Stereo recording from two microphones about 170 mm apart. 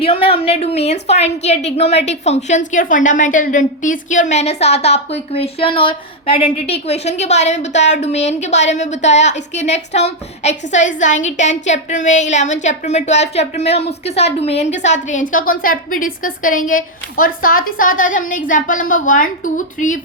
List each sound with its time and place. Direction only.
0.0 s a woman's voice: 35° left (ahead or behind); by 20.0 s 50° left (ahead or behind)